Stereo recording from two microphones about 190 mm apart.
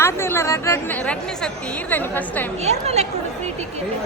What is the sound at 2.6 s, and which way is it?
Speech, 35° right (ahead or behind).